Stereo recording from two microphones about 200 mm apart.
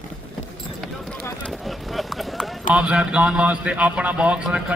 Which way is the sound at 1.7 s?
Centre (ahead or behind).